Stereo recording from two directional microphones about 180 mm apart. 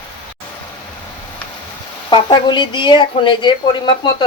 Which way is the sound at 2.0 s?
25° left (ahead or behind).